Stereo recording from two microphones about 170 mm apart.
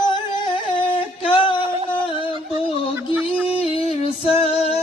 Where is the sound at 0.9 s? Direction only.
30° left (ahead or behind).